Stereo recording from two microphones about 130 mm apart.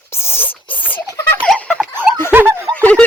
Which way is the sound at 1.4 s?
Centre (ahead or behind).